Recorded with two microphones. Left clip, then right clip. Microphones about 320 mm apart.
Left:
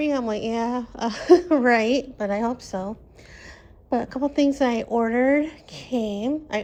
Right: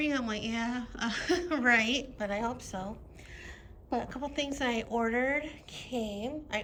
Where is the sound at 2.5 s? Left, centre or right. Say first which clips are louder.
Left 9 dB; left.